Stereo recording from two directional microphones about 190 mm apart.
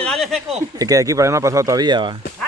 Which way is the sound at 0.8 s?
15° right (ahead or behind).